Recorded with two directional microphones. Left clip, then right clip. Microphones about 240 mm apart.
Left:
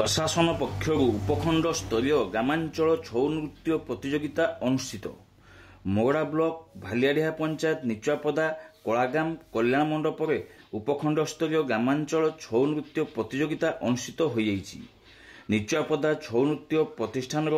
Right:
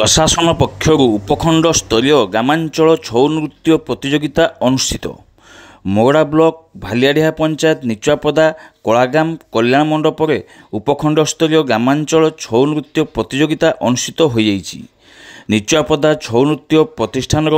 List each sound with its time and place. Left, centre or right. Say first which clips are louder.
0.0 s speech: right 13 dB; right